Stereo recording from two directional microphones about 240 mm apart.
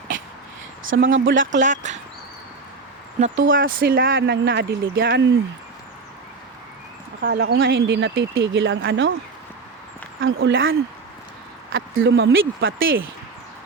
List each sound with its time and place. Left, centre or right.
0.1 s a sound: right
0.9 s speech: right
1.5 s speech: right
3.5 s speech: right
7.2 s speech: right
10.2 s speech: right
11.7 s speech: right